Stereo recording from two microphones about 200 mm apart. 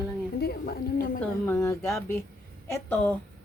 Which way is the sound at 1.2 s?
10° left (ahead or behind).